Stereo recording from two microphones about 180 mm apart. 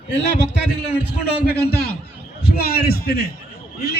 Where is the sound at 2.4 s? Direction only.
60° left (ahead or behind).